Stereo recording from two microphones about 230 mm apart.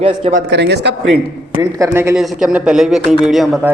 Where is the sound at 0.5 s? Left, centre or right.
Right.